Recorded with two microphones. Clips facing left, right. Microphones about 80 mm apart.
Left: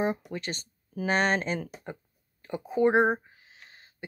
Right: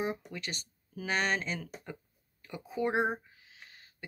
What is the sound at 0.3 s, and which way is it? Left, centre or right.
Speech, left.